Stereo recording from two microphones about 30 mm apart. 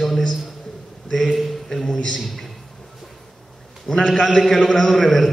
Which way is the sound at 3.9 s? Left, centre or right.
Centre.